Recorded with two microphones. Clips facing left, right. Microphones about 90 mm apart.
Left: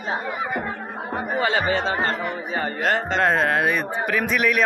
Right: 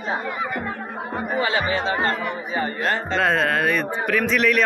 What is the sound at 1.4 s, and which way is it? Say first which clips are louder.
Speech: left 3 dB; 30° left (ahead or behind).